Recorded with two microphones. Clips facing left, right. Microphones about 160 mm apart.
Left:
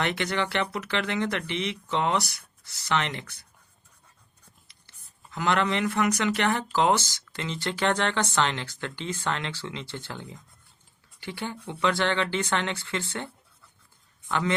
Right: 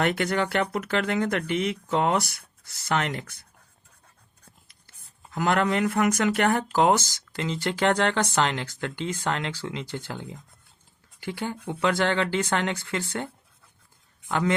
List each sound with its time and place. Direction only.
0.0 s speech: 45° right (ahead or behind)
5.3 s speech: 45° right (ahead or behind)
14.3 s speech: 40° right (ahead or behind)